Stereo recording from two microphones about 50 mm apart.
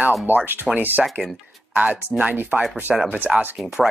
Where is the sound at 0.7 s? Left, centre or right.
Right.